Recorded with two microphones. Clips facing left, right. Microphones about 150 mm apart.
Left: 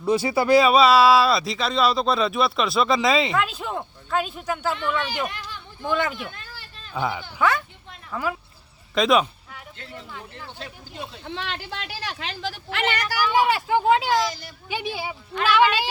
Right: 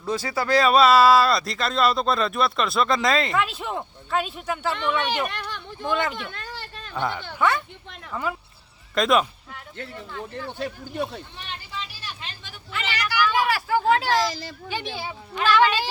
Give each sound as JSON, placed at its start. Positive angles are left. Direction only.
{"t": 0.0, "sound": "speech", "side_deg": 10}
{"t": 5.3, "sound": "a sound", "side_deg": -65}
{"t": 5.8, "sound": "speech", "side_deg": 5}
{"t": 6.3, "sound": "a sound", "side_deg": -65}
{"t": 6.9, "sound": "speech", "side_deg": 10}
{"t": 9.0, "sound": "a sound", "side_deg": 0}
{"t": 10.6, "sound": "speech", "side_deg": -65}
{"t": 11.3, "sound": "speech", "side_deg": 90}
{"t": 13.2, "sound": "speech", "side_deg": 20}